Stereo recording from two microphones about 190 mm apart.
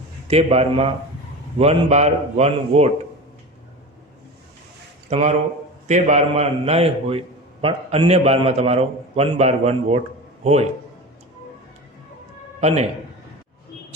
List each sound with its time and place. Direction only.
0.3 s a man's voice: 35° right (ahead or behind)
5.0 s a man's voice: 35° right (ahead or behind)
12.5 s a sound: 35° right (ahead or behind)